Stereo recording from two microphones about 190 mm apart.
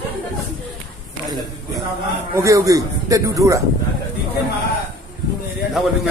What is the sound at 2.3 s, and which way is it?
A man's voice, 15° right (ahead or behind).